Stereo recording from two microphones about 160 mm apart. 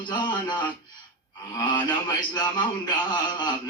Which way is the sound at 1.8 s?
25° left (ahead or behind).